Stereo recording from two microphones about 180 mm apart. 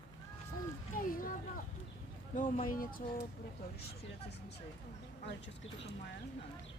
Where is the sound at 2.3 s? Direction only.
50° left (ahead or behind).